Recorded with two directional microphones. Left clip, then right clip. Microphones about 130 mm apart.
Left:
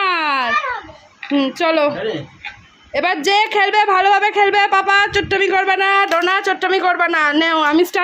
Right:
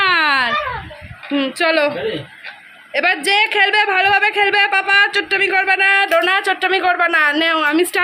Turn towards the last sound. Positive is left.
turn(degrees=35)  # may be behind; listen again after turning